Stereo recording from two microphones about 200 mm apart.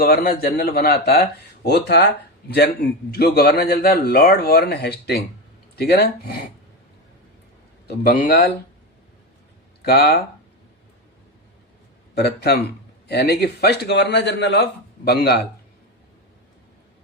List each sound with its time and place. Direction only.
0.0 s a man's voice: 50° left (ahead or behind)
3.1 s speech: 50° left (ahead or behind)
7.9 s speech: 50° left (ahead or behind)
9.8 s speech: 50° left (ahead or behind)
12.1 s a man's voice: 55° left (ahead or behind)